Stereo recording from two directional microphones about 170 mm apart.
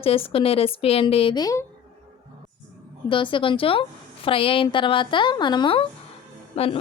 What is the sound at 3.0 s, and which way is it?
A woman's voice, 30° left (ahead or behind).